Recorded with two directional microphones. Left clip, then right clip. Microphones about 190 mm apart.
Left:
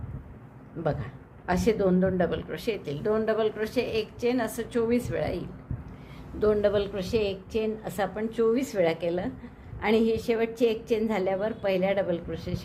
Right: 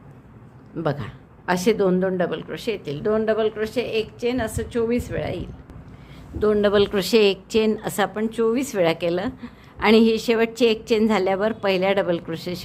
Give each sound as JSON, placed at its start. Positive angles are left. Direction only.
{"t": 0.8, "sound": "a woman's voice", "side_deg": -25}
{"t": 6.4, "sound": "a woman's voice", "side_deg": -20}